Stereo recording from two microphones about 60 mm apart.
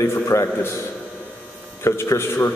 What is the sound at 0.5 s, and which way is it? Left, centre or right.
Speech, left.